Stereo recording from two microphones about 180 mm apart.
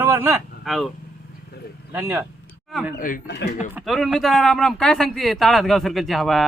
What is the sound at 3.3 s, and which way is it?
Speech, 70° left (ahead or behind).